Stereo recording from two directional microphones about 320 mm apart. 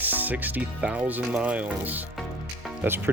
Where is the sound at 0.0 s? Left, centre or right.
Centre.